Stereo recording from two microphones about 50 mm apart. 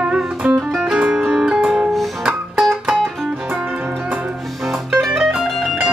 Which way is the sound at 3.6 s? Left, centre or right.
Right.